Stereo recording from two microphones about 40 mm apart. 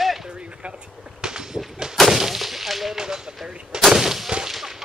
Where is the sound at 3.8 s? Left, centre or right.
Centre.